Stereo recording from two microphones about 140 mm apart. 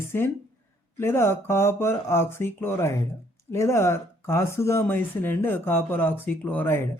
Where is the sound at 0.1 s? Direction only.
15° left (ahead or behind).